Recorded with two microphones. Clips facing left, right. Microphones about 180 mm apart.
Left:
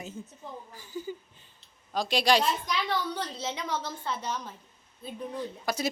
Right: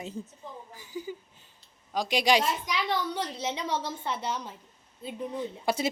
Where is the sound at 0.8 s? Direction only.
15° right (ahead or behind).